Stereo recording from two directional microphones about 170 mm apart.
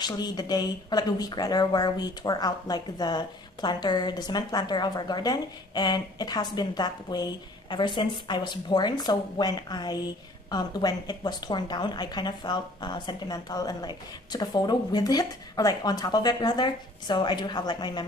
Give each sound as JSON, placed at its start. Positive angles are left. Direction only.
{"t": 0.0, "sound": "speech", "side_deg": 25}